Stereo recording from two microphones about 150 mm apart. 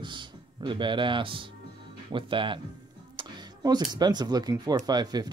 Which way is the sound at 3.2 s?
30° right (ahead or behind).